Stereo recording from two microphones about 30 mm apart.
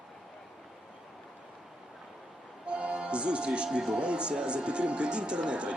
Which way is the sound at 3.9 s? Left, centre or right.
Right.